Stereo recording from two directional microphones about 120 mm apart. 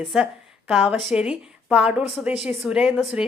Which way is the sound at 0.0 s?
Centre (ahead or behind).